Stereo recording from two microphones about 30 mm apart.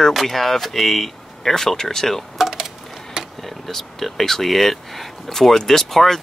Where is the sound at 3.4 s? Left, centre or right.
Centre.